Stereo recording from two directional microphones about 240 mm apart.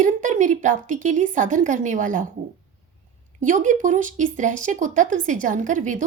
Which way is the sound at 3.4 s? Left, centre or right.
Right.